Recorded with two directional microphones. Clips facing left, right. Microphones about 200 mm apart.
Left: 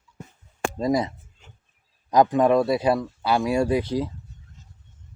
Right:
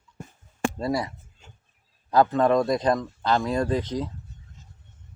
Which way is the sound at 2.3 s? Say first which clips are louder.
Left 2 dB; 10° left (ahead or behind).